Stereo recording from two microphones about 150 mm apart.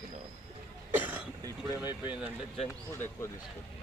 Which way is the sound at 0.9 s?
10° right (ahead or behind).